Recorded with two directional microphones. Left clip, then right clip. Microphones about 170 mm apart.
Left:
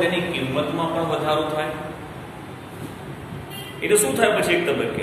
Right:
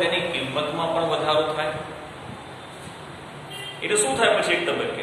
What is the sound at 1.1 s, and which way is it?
Speech, 5° left (ahead or behind).